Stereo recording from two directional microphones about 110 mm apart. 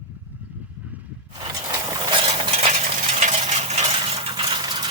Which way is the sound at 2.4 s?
60° right (ahead or behind).